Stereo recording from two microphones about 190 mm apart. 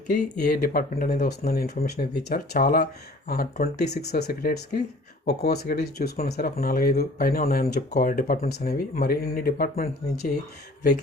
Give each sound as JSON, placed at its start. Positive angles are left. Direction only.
{"t": 0.1, "sound": "speech", "side_deg": 45}